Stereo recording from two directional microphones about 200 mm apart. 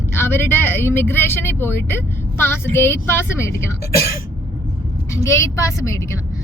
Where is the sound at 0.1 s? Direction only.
10° left (ahead or behind).